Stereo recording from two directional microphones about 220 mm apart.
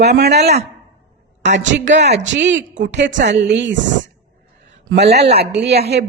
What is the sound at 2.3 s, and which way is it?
A woman's voice, 55° right (ahead or behind).